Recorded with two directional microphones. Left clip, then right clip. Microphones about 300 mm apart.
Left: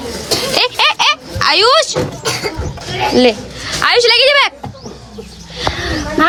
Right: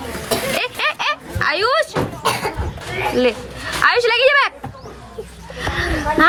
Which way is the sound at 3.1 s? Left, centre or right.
Centre.